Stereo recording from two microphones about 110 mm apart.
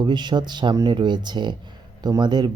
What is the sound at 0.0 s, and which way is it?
Speech, 45° right (ahead or behind).